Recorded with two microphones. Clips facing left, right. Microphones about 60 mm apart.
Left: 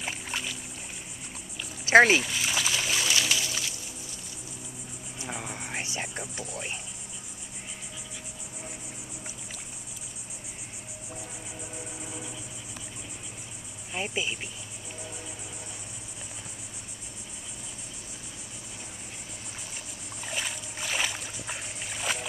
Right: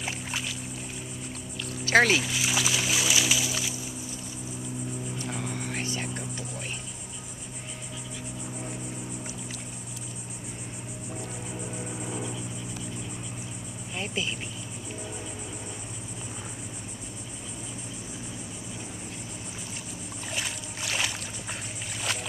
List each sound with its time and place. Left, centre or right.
0.0 s music: centre
1.9 s speech: left
2.1 s music: centre
5.2 s music: centre
11.1 s music: centre
13.9 s cricket: centre
20.2 s boat: centre